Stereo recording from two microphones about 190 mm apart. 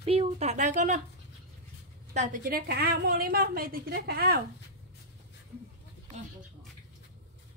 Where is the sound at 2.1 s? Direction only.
40° right (ahead or behind).